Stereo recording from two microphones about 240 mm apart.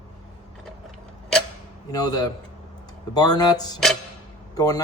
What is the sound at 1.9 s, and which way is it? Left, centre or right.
Speech, centre.